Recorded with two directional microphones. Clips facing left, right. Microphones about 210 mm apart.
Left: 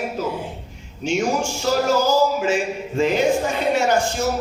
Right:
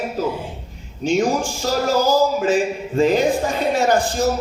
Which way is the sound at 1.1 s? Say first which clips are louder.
Right 3 dB; 35° right (ahead or behind).